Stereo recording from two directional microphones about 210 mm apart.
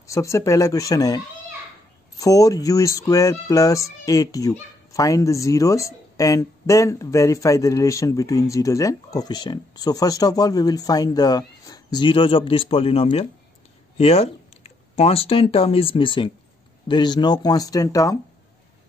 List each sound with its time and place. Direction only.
0.0 s speech: 15° left (ahead or behind)